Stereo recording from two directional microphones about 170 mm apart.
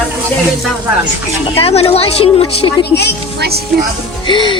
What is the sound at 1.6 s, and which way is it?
Speech, 35° left (ahead or behind).